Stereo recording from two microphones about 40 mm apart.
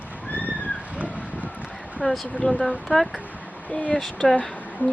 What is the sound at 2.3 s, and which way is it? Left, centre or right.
Speech, left.